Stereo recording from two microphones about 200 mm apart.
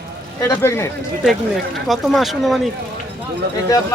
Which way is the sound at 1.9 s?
Centre (ahead or behind).